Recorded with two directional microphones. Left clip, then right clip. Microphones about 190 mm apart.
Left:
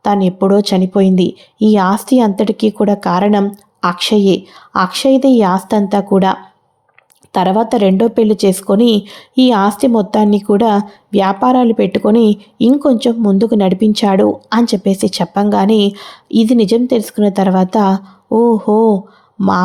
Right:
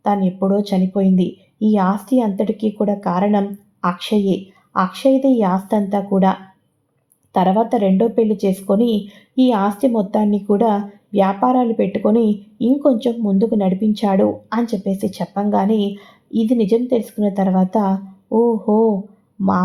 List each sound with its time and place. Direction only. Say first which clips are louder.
0.0 s a woman's voice: left 5 dB; 35° left (ahead or behind)
7.3 s a woman's voice: left 3 dB; 35° left (ahead or behind)